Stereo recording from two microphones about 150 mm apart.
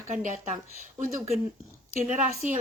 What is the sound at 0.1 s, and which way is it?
A woman's voice, 55° right (ahead or behind).